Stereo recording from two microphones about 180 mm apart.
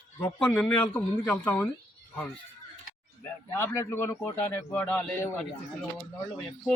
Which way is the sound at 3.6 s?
15° left (ahead or behind).